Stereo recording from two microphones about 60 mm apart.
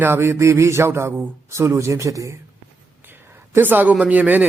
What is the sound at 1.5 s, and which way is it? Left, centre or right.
Speech, right.